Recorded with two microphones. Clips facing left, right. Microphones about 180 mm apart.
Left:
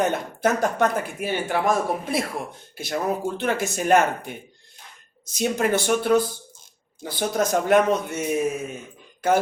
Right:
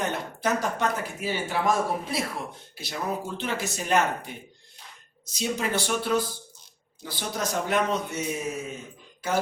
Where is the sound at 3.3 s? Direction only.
50° left (ahead or behind).